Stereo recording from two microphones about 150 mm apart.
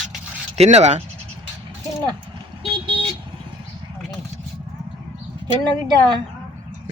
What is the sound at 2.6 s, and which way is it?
Vehicle, 35° right (ahead or behind).